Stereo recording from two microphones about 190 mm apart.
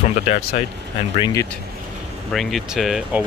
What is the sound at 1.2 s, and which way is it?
Speech, 15° left (ahead or behind).